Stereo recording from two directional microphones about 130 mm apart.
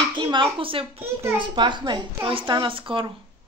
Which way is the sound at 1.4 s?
35° right (ahead or behind).